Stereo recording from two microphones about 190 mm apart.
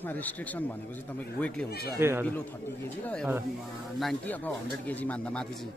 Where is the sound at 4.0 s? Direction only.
5° left (ahead or behind).